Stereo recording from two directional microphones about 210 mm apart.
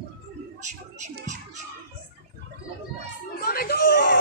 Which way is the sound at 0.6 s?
35° right (ahead or behind).